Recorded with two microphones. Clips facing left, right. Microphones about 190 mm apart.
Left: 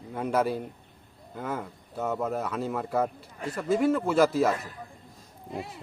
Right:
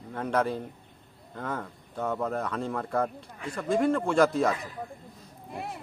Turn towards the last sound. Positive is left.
turn(degrees=-55)  # may be behind; listen again after turning